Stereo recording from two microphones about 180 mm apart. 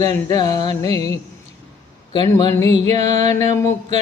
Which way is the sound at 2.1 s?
20° left (ahead or behind).